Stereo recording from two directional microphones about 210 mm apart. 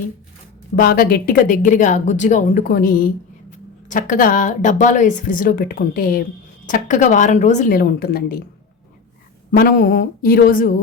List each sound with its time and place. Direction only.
0.8 s speech: 45° left (ahead or behind)
9.5 s speech: 40° left (ahead or behind)